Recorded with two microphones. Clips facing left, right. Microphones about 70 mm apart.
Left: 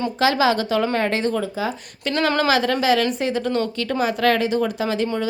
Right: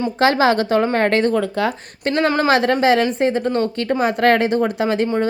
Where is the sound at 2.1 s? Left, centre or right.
Right.